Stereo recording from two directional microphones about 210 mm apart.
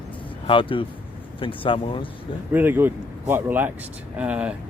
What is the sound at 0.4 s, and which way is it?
Speech, 25° left (ahead or behind).